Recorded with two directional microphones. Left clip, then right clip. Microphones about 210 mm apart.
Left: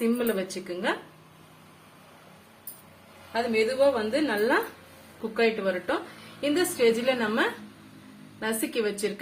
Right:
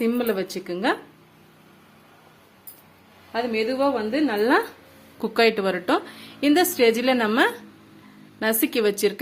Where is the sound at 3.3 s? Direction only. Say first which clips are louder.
Right 1 dB; 40° right (ahead or behind).